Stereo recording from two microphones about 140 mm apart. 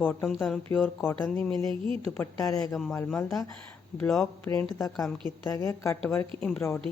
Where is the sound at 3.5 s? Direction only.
10° left (ahead or behind).